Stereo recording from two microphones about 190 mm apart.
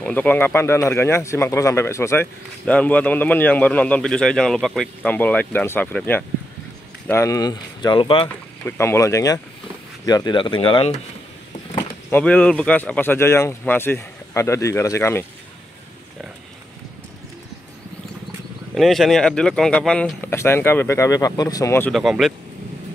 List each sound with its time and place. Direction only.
0.0 s speech: 10° left (ahead or behind); by 8.3 s 25° left (ahead or behind)
8.6 s speech: 15° left (ahead or behind); by 11.0 s 30° left (ahead or behind)
12.1 s speech: 10° left (ahead or behind)
18.8 s speech: centre (ahead or behind)
21.9 s speech: centre (ahead or behind)